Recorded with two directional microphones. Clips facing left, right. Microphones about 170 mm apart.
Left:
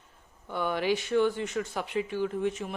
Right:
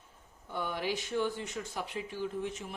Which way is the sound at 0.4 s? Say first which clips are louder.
Left 6 dB; 75° left (ahead or behind).